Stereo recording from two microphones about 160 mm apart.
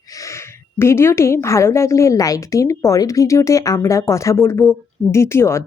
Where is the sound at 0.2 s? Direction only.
15° left (ahead or behind).